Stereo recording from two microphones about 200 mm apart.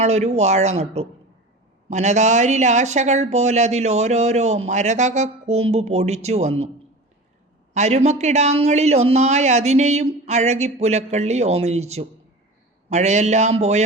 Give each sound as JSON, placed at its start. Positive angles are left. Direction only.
{"t": 0.0, "sound": "a man's voice", "side_deg": -35}
{"t": 7.7, "sound": "a man's voice", "side_deg": -35}